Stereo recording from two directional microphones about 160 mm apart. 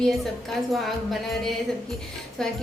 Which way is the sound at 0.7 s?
Centre (ahead or behind).